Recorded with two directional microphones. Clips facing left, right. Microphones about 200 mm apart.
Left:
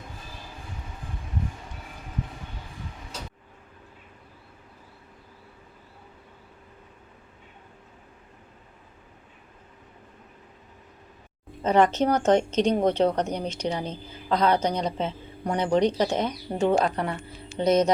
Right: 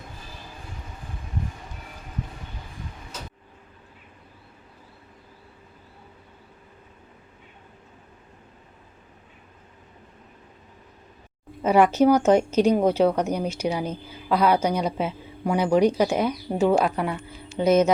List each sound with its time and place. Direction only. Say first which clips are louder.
11.6 s speech: right 3 dB; 10° right (ahead or behind)